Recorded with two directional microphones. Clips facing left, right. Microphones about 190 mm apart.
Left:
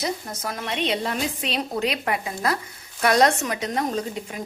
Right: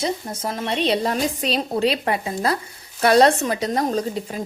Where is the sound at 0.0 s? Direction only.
30° right (ahead or behind).